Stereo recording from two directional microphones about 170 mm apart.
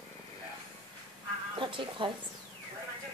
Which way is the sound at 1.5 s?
30° right (ahead or behind).